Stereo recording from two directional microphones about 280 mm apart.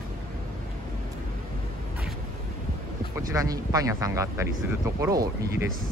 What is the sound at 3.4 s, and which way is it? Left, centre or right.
Speech, centre.